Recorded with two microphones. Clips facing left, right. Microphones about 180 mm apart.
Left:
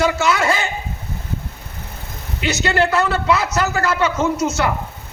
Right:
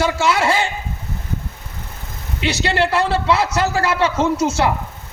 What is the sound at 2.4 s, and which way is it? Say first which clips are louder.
A man's voice: left 1 dB; 30° right (ahead or behind).